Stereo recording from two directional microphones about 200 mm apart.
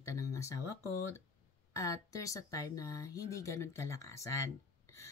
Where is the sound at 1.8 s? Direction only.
15° left (ahead or behind).